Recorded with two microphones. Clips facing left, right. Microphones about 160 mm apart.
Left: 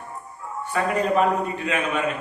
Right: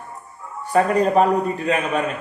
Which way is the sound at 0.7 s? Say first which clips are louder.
Right 5 dB; 40° right (ahead or behind).